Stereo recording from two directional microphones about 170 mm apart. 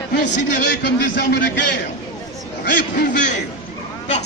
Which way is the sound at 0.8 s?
80° left.